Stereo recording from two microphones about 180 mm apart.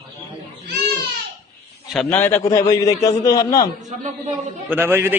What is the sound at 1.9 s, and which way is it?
A man's voice, 10° left (ahead or behind).